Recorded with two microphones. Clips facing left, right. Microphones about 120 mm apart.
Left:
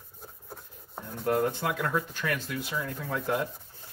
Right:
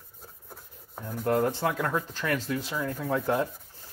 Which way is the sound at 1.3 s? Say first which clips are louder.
Right 2 dB; 30° right (ahead or behind).